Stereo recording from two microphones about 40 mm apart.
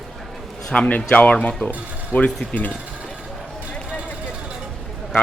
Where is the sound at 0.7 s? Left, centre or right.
Left.